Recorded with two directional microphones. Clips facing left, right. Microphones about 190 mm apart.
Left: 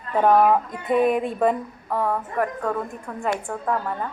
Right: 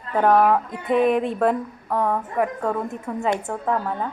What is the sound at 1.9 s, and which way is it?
A woman's voice, 15° right (ahead or behind).